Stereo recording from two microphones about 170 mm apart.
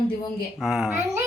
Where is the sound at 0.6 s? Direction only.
5° right (ahead or behind).